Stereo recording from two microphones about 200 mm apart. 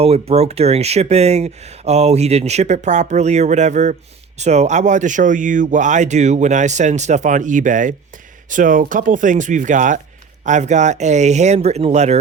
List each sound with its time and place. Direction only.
0.0 s speech: 30° right (ahead or behind)